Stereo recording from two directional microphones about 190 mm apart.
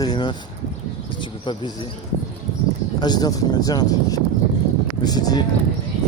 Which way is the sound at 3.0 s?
20° left (ahead or behind).